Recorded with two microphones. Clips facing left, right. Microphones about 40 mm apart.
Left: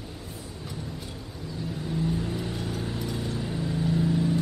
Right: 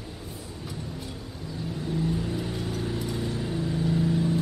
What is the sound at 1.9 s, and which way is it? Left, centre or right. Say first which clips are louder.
Vehicle: even; centre.